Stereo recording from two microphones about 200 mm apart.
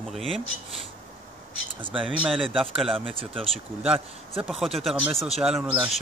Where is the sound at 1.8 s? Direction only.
25° right (ahead or behind).